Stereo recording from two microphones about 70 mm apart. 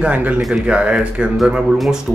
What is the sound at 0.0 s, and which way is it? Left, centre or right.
Speech, right.